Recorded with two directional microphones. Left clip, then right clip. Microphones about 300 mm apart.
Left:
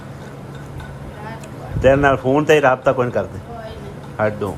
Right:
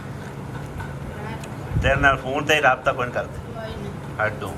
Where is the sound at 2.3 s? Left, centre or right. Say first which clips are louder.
Left 5 dB; left.